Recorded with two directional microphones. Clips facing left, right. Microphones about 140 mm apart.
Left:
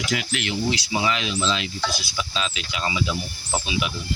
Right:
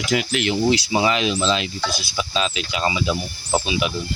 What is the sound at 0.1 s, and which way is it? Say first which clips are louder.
Speech: right 8 dB; 25° right (ahead or behind).